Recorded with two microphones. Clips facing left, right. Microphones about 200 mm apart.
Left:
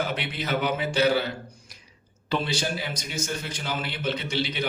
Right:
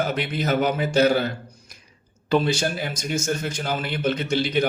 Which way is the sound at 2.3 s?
45° right (ahead or behind).